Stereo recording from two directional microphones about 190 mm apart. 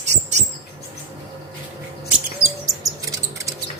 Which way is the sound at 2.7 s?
20° right (ahead or behind).